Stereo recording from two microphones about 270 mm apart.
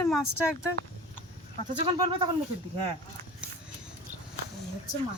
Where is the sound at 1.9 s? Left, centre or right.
Centre.